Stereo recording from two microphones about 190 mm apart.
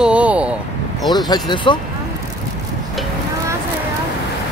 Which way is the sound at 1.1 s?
20° left (ahead or behind).